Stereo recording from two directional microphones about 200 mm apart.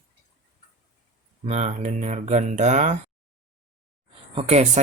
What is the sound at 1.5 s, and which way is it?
Speech, 35° right (ahead or behind).